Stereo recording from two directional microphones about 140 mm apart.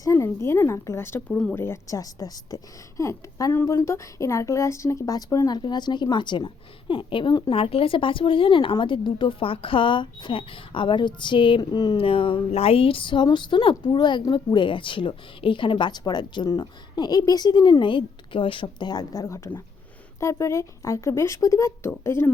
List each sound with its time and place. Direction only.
0.0 s a woman's voice: 20° left (ahead or behind)